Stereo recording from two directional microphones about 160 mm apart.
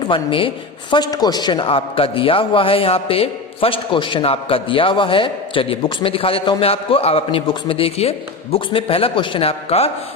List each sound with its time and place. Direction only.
0.1 s a man's voice: 35° left (ahead or behind)